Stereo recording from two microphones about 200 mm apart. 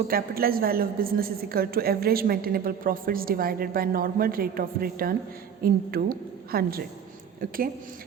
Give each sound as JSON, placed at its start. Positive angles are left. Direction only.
{"t": 0.1, "sound": "a woman's voice", "side_deg": -45}